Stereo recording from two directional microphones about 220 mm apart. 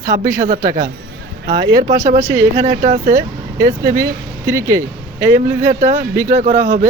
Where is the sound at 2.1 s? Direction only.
10° right (ahead or behind).